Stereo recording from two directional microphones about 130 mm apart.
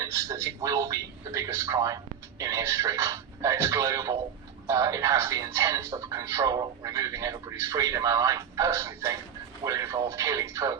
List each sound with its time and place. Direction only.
0.0 s speech: 25° right (ahead or behind)